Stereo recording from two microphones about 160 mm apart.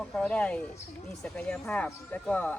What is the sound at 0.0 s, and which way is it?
Speech, 5° left (ahead or behind).